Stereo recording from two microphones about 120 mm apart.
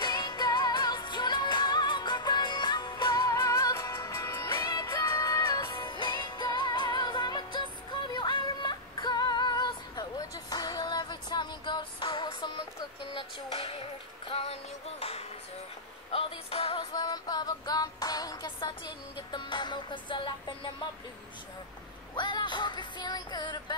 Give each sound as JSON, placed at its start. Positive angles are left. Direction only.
{"t": 0.0, "sound": "music", "side_deg": 35}
{"t": 16.1, "sound": "a sound", "side_deg": 50}
{"t": 16.9, "sound": "music", "side_deg": 35}
{"t": 22.1, "sound": "music", "side_deg": 40}